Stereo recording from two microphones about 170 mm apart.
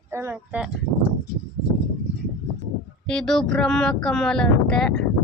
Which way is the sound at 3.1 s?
5° left (ahead or behind).